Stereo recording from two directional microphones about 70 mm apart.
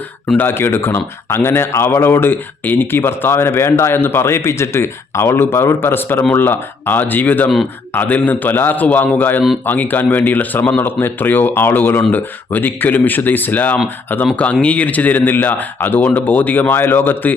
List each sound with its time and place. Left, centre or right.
0.3 s speech: left